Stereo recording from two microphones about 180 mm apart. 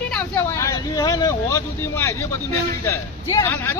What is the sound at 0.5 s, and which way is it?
Speech, 20° left (ahead or behind).